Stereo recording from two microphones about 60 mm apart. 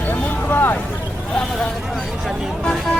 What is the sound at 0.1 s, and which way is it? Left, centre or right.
Vehicle, left.